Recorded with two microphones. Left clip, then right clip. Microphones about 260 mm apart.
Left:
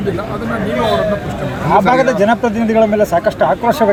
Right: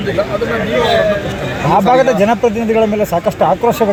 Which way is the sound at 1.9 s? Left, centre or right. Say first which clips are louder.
Right 1 dB; right.